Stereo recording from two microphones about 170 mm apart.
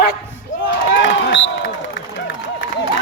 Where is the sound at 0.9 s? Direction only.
90° left.